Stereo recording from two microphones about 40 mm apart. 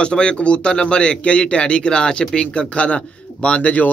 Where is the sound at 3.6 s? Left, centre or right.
Left.